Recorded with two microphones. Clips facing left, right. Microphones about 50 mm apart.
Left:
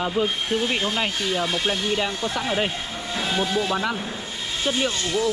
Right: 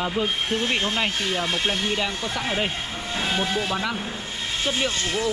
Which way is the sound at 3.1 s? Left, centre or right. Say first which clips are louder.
Left 1 dB; centre.